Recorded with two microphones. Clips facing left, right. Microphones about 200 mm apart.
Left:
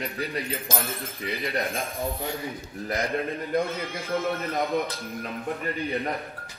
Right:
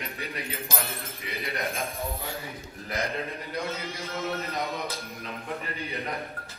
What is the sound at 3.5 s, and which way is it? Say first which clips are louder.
Speech: left 7 dB; 50° left (ahead or behind).